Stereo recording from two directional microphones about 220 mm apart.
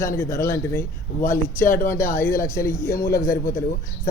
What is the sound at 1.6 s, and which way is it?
Speech, 40° left (ahead or behind).